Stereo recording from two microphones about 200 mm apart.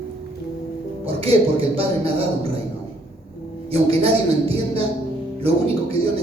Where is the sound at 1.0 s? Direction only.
30° right (ahead or behind).